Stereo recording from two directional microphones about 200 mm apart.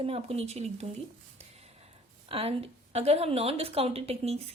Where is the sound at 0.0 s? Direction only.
30° right (ahead or behind).